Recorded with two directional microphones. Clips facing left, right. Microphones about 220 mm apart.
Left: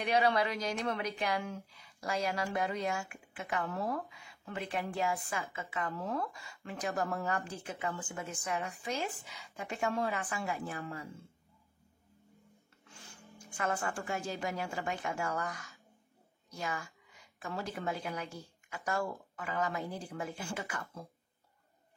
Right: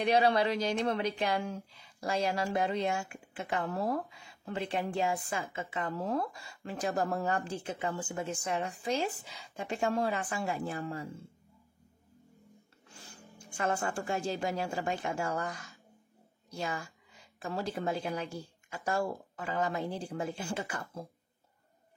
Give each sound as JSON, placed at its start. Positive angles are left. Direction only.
{"t": 0.0, "sound": "speech", "side_deg": -30}
{"t": 13.6, "sound": "a woman's voice", "side_deg": -30}